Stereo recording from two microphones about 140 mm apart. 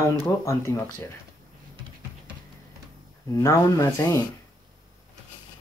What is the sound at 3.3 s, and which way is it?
Speech, 25° left (ahead or behind).